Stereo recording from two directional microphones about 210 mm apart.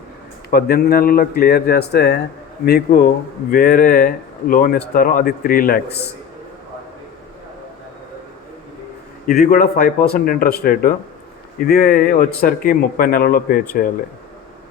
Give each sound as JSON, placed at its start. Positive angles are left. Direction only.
{"t": 0.5, "sound": "speech", "side_deg": 50}
{"t": 9.2, "sound": "speech", "side_deg": 40}